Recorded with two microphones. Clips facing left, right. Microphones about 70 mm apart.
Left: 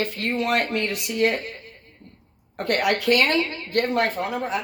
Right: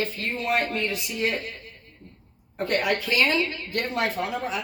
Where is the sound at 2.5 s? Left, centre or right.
Left.